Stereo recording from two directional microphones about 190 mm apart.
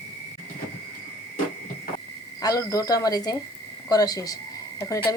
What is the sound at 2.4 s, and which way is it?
Speech, 20° left (ahead or behind).